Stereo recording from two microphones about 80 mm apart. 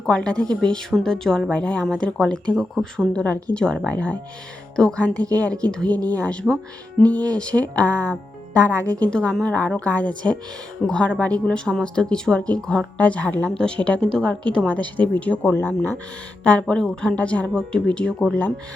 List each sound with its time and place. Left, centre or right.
0.0 s speech: centre
5.1 s a woman's voice: right
5.4 s speech: centre